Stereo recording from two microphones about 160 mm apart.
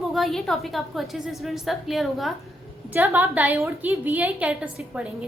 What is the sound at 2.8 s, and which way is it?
A woman's voice, 10° right (ahead or behind).